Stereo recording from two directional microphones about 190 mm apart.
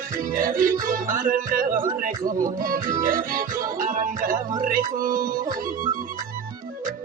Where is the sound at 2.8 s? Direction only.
45° right (ahead or behind).